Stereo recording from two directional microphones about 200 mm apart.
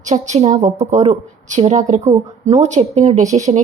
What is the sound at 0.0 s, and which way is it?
A woman's voice, 35° right (ahead or behind).